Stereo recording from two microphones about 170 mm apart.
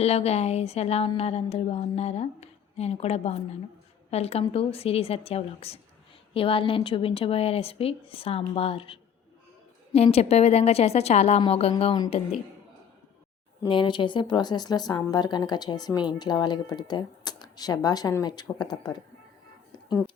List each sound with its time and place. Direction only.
0.0 s speech: 40° left (ahead or behind)
13.6 s speech: 30° left (ahead or behind)